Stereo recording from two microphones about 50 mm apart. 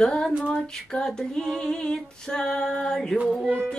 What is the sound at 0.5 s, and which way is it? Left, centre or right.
Female singing, centre.